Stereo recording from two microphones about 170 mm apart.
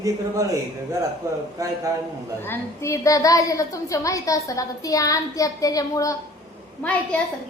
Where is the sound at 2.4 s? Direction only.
15° left (ahead or behind).